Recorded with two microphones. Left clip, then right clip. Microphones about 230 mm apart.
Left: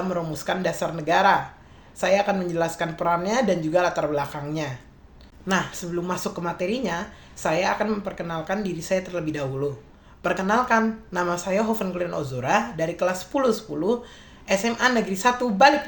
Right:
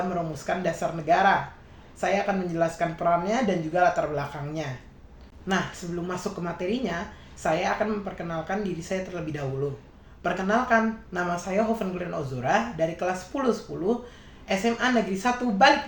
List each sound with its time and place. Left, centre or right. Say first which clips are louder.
0.1 s speech: left 2 dB; left
6.1 s speech: left 2 dB; left